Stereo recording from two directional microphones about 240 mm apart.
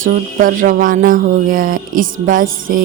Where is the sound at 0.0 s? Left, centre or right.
Right.